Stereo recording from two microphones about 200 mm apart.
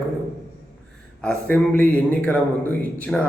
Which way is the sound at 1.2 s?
5° left (ahead or behind).